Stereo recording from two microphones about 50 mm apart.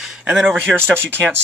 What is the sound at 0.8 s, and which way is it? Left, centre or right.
Speech, right.